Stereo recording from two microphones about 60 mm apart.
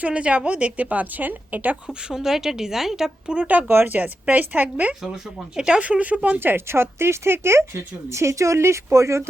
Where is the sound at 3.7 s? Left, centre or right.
Right.